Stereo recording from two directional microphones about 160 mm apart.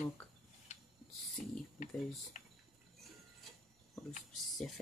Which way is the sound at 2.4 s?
55° left (ahead or behind).